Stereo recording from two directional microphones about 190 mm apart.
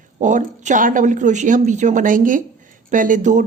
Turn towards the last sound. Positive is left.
turn(degrees=-40)  # may be behind; listen again after turning